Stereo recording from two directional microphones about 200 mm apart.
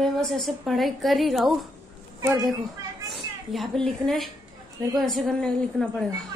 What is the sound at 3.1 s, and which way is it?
A woman's voice, centre (ahead or behind).